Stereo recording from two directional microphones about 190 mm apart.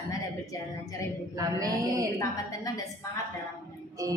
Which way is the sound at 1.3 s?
20° right (ahead or behind).